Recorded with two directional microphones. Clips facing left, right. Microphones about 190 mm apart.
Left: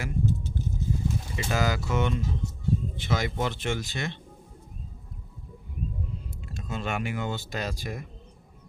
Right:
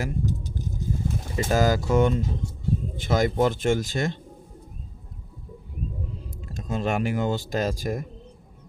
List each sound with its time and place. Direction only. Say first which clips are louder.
0.0 s a sound: right 1 dB; 40° right (ahead or behind)
1.0 s speech: right 4 dB; 45° right (ahead or behind)
6.5 s speech: right 6 dB; 40° right (ahead or behind)